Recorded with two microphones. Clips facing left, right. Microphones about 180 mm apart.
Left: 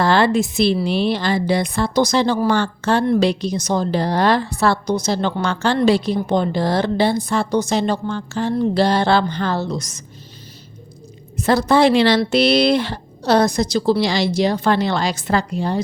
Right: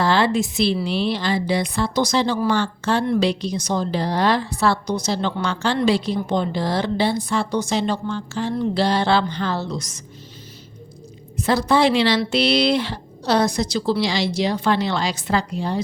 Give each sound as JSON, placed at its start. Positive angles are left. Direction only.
{"t": 0.0, "sound": "a woman's voice", "side_deg": 55}
{"t": 11.4, "sound": "a woman's voice", "side_deg": 45}